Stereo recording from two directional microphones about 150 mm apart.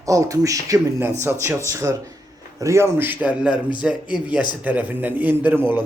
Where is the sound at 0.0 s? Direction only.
20° right (ahead or behind).